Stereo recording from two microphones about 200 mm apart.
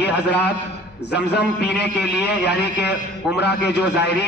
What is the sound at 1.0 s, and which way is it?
A man's voice, 60° left (ahead or behind).